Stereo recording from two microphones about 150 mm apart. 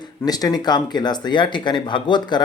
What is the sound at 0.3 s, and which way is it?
Speech, 25° left (ahead or behind).